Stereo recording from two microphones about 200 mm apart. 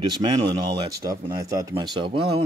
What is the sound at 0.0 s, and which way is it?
Speech, 20° right (ahead or behind).